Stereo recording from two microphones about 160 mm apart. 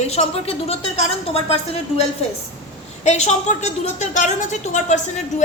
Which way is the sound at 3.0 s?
45° left (ahead or behind).